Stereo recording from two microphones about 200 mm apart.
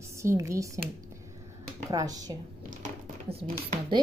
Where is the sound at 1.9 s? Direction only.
20° right (ahead or behind).